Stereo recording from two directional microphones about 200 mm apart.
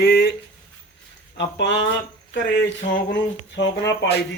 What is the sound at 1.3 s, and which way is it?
Speech, 60° left (ahead or behind).